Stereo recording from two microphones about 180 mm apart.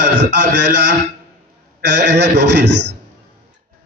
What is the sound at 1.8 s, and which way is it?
Speech, 70° right (ahead or behind).